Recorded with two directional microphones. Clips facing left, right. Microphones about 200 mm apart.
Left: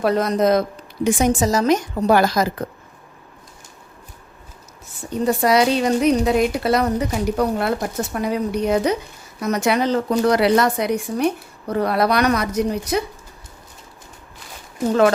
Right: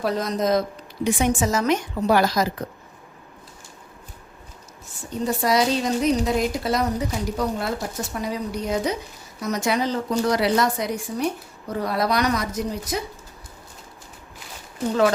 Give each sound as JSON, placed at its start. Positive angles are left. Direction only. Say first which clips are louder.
{"t": 0.0, "sound": "a woman's voice", "louder": "left 6 dB", "side_deg": 60}
{"t": 1.0, "sound": "a woman's voice", "louder": "left 4 dB", "side_deg": 40}
{"t": 5.2, "sound": "a woman's voice", "louder": "left 4 dB", "side_deg": 65}